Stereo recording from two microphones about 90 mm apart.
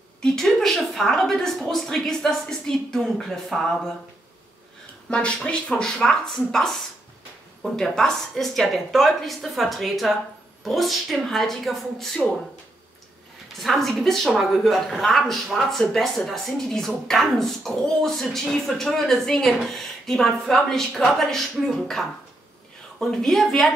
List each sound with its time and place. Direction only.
0.2 s a woman's voice: 5° left (ahead or behind)
5.1 s a woman's voice: 10° left (ahead or behind)
13.6 s a woman's voice: centre (ahead or behind)